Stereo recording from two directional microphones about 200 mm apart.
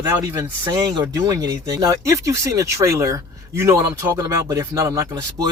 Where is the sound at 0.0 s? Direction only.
15° right (ahead or behind).